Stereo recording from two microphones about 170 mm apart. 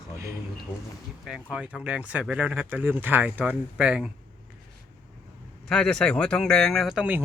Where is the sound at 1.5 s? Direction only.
5° right (ahead or behind).